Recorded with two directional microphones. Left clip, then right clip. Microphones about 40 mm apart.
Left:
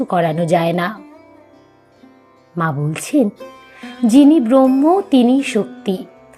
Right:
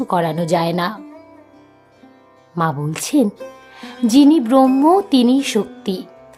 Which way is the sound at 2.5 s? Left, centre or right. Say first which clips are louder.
Even; centre.